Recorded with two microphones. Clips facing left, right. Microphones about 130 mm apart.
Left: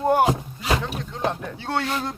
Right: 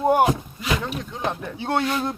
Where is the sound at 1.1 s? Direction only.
5° right (ahead or behind).